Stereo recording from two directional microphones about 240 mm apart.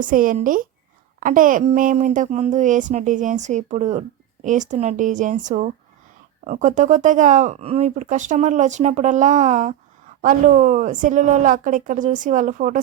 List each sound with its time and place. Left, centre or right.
0.0 s speech: right